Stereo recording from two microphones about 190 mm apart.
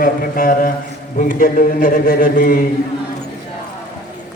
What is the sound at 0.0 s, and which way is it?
A man's voice, 50° left (ahead or behind).